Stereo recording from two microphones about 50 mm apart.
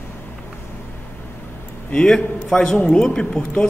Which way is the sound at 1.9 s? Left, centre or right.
Centre.